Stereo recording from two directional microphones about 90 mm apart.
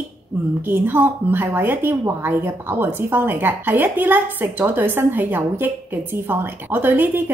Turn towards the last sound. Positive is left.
turn(degrees=-20)  # may be behind; listen again after turning